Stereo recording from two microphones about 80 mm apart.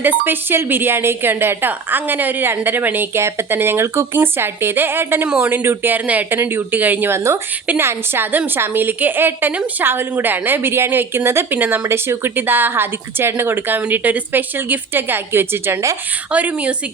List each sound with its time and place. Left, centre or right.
0.0 s speech: right
16.3 s a woman's voice: centre